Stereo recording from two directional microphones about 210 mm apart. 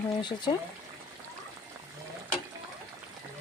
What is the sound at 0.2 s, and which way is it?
Speech, 20° left (ahead or behind).